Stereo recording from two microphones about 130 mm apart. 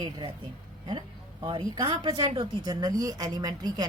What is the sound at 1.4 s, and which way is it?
Speech, 35° right (ahead or behind).